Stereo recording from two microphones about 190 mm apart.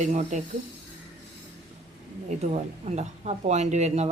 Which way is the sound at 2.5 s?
35° right (ahead or behind).